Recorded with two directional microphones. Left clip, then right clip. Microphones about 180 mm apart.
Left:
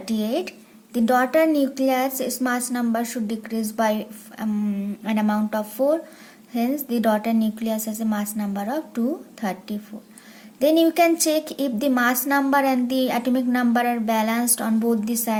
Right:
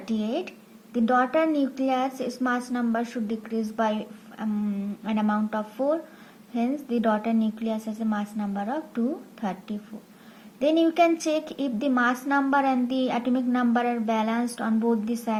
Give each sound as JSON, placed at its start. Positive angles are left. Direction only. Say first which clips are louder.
{"t": 0.0, "sound": "a woman's voice", "louder": "left 4 dB", "side_deg": 30}